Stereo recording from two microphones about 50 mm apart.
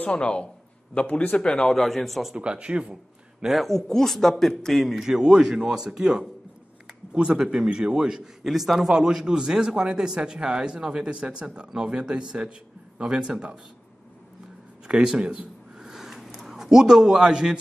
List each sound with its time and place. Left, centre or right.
0.0 s a man's voice: left; by 2.3 s centre
2.3 s speech: right
3.5 s speech: centre
4.9 s a man's voice: centre
14.9 s a sound: centre
16.3 s a man's voice: centre